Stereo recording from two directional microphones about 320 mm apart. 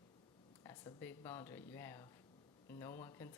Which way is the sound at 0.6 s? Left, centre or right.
Centre.